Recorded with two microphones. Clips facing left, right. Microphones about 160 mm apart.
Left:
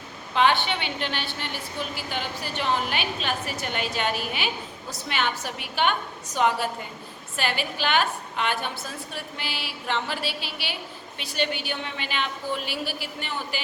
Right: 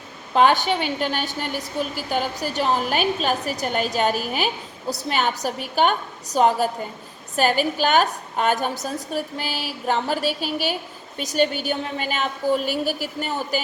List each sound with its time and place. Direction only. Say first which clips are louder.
0.3 s a woman's voice: right 5 dB; 45° right (ahead or behind)